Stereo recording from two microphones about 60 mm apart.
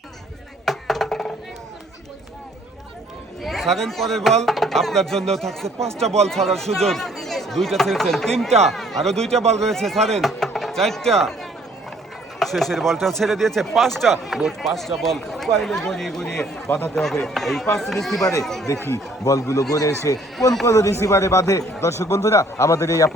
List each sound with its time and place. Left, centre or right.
0.6 s music: centre
3.4 s speech: centre
12.4 s speech: centre
18.2 s a man's voice: left
18.4 s speech: centre
19.2 s a man's voice: left
20.1 s a man's voice: left